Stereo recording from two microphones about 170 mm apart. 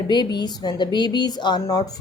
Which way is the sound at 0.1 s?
25° left (ahead or behind).